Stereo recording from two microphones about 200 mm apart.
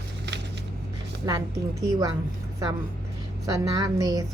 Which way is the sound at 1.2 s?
15° right (ahead or behind).